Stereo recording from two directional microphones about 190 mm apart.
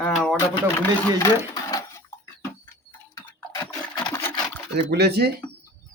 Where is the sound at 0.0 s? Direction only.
Centre (ahead or behind).